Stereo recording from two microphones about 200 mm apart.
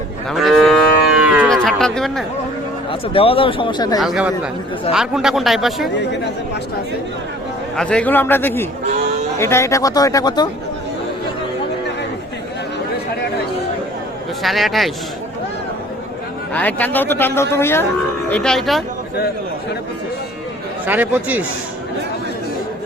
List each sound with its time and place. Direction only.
0.3 s livestock: centre (ahead or behind)
2.9 s speech: 25° left (ahead or behind)
4.0 s speech: centre (ahead or behind)
7.8 s a man's voice: 5° left (ahead or behind)
14.4 s speech: centre (ahead or behind)
16.5 s a man's voice: 10° left (ahead or behind)
20.8 s speech: 10° right (ahead or behind)